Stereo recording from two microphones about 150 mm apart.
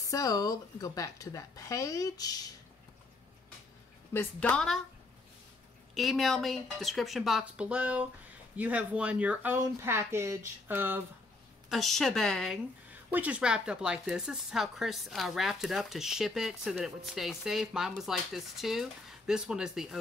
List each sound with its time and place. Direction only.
0.1 s a woman's voice: 25° left (ahead or behind)
4.1 s a woman's voice: 10° left (ahead or behind)
5.9 s speech: centre (ahead or behind)
11.7 s speech: centre (ahead or behind)
13.1 s speech: 10° right (ahead or behind)